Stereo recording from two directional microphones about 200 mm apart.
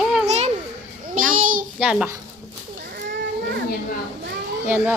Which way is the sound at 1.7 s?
5° right (ahead or behind).